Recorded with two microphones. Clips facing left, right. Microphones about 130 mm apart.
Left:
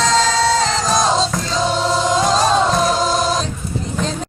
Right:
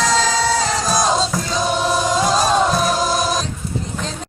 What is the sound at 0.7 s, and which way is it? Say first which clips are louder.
Music: left 1 dB; 10° right (ahead or behind).